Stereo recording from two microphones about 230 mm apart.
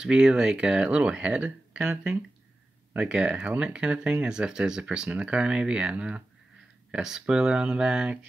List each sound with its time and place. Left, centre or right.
0.0 s speech: centre